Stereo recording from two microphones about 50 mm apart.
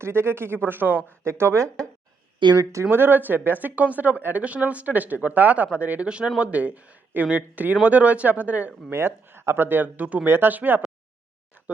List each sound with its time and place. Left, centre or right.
0.0 s speech: right
1.2 s speech: right
2.9 s speech: right
8.9 s speech: right
9.6 s speech: right
10.2 s speech: right